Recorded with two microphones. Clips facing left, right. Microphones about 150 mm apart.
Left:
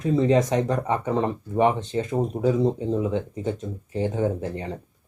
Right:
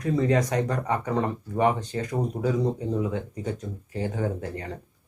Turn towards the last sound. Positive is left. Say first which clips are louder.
# left 4 dB
turn(degrees=20)  # may be behind; listen again after turning